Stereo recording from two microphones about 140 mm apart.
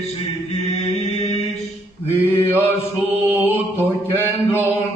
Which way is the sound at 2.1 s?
15° left (ahead or behind).